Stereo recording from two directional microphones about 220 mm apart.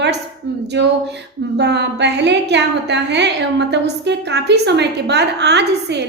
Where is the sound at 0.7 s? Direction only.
50° right (ahead or behind).